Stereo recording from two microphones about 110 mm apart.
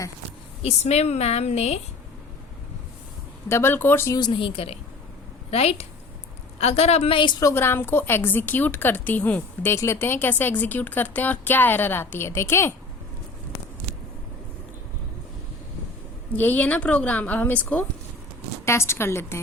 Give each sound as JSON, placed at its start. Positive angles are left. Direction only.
{"t": 0.6, "sound": "a woman's voice", "side_deg": 75}
{"t": 3.5, "sound": "a woman's voice", "side_deg": 20}
{"t": 4.2, "sound": "a woman's voice", "side_deg": 50}
{"t": 7.2, "sound": "a woman's voice", "side_deg": 45}
{"t": 7.4, "sound": "a woman's voice", "side_deg": 20}
{"t": 16.3, "sound": "a woman's voice", "side_deg": 15}
{"t": 18.6, "sound": "a woman's voice", "side_deg": 25}